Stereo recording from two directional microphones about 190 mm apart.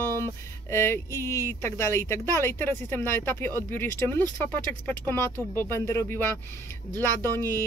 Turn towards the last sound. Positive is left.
turn(degrees=15)  # may be behind; listen again after turning